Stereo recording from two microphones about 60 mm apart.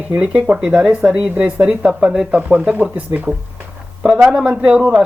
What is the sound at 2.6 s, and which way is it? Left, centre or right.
Speech, right.